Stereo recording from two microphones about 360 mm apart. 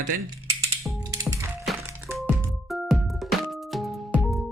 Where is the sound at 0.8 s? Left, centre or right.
Centre.